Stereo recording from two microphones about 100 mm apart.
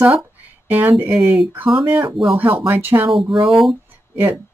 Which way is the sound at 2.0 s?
60° right (ahead or behind).